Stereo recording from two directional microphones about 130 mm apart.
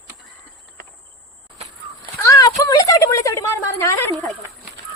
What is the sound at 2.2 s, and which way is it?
Speech, 30° left (ahead or behind).